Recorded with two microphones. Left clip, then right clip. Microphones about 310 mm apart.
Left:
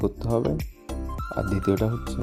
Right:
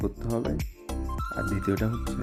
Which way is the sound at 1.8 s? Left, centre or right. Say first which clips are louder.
Left 3 dB; centre.